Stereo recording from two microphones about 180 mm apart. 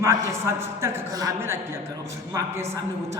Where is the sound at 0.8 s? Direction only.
20° right (ahead or behind).